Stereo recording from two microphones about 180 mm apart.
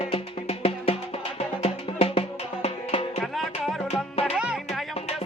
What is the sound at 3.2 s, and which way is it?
Music, centre (ahead or behind).